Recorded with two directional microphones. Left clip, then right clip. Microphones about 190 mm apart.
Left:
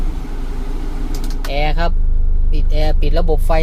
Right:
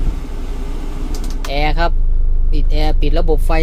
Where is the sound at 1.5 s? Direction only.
20° right (ahead or behind).